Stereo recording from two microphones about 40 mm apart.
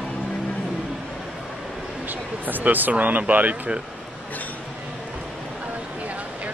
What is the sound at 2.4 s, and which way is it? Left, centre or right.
Speech, right.